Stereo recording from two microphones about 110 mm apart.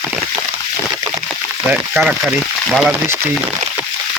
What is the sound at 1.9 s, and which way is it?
Speech, 5° right (ahead or behind).